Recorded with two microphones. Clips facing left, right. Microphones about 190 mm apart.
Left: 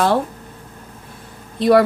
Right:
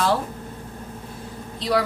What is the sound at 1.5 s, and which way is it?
Speech, 55° left (ahead or behind).